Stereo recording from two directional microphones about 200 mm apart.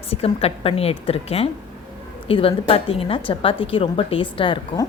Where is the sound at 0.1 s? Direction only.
30° left (ahead or behind).